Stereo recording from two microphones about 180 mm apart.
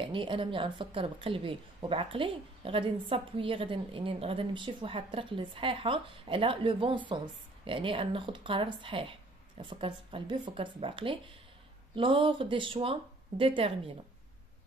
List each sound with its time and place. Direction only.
0.0 s a woman's voice: 30° right (ahead or behind)